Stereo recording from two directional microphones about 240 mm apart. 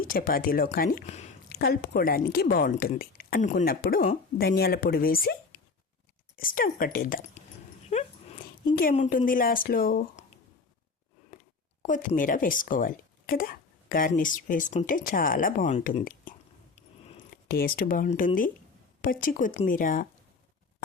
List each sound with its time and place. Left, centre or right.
0.0 s a woman's voice: left
1.5 s a woman's voice: left
7.9 s dog: left
8.7 s a woman's voice: left
11.8 s a woman's voice: left
16.7 s a sound: left
17.5 s a woman's voice: left